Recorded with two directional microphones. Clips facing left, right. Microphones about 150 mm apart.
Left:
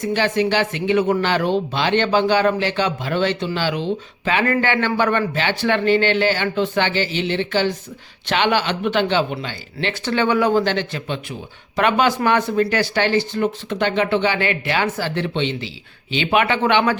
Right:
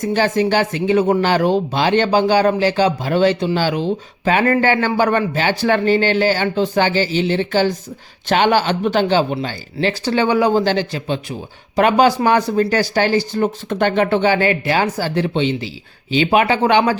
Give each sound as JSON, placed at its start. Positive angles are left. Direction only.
{"t": 0.0, "sound": "speech", "side_deg": -40}